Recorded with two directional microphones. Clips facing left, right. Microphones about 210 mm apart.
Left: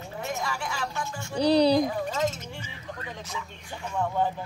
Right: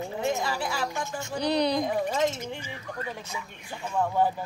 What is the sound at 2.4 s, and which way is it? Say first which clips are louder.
Speech: right 4 dB; 15° right (ahead or behind).